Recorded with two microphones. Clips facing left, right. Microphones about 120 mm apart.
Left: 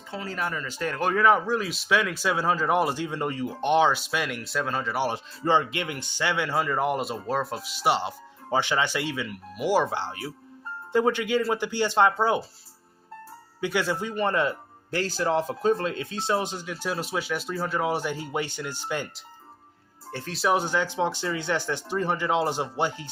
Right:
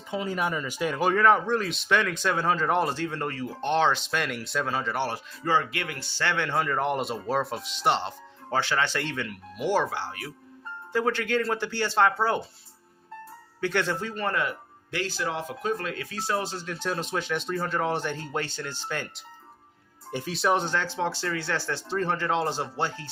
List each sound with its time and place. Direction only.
0.1 s speech: 15° right (ahead or behind); by 5.0 s centre (ahead or behind)
5.0 s speech: 25° left (ahead or behind); by 9.8 s 5° left (ahead or behind)
9.8 s speech: 25° left (ahead or behind)
13.6 s speech: 10° left (ahead or behind)
14.8 s speech: 40° left (ahead or behind); by 19.0 s 15° left (ahead or behind)
20.1 s speech: 15° right (ahead or behind)
20.3 s speech: 5° left (ahead or behind)